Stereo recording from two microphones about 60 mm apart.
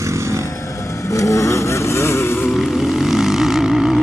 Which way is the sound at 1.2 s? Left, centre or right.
Left.